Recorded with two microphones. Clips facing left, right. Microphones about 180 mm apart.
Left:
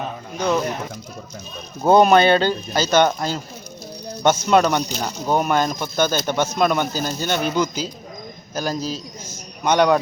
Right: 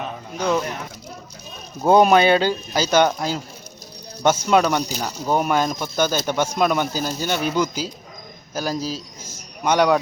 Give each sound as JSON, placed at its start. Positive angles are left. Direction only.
{"t": 0.3, "sound": "speech", "side_deg": -10}
{"t": 1.9, "sound": "speech", "side_deg": -5}